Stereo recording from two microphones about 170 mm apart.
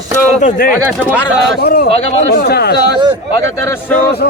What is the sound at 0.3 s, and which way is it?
Speech, 50° left (ahead or behind).